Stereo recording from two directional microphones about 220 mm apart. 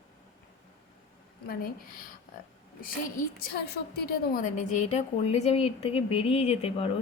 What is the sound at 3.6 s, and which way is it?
A woman's voice, 45° left (ahead or behind).